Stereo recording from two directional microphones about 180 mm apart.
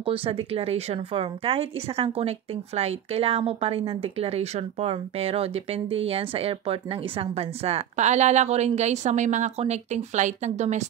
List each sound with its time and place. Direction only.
0.0 s speech: 30° right (ahead or behind)